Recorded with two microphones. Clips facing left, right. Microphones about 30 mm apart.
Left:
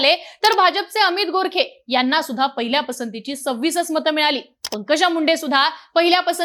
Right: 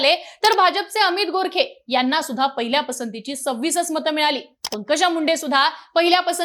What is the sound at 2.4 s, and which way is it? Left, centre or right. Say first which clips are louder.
A woman's voice: left 1 dB; centre.